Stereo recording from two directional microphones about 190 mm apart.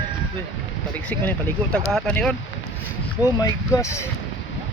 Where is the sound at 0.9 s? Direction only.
10° left (ahead or behind).